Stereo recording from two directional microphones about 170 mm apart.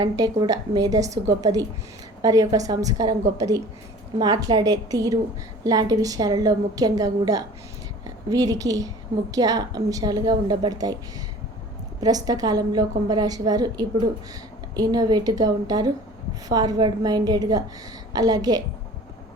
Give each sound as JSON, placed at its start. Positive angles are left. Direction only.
{"t": 0.4, "sound": "a woman's voice", "side_deg": -20}
{"t": 11.9, "sound": "a woman's voice", "side_deg": -20}